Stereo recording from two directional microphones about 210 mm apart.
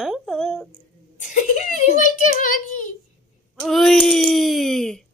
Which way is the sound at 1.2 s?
35° left (ahead or behind).